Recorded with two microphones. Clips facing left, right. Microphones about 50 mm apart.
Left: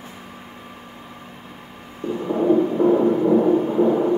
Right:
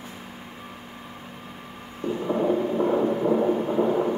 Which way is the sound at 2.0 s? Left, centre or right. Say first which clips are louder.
Left 4 dB; centre.